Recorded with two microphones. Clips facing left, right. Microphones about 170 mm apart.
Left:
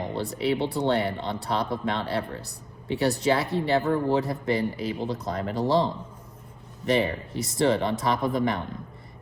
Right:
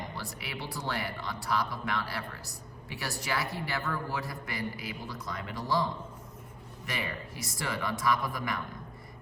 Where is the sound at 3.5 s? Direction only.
30° left (ahead or behind).